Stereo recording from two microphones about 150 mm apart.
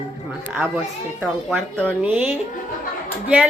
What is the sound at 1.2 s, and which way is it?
Speech, centre (ahead or behind).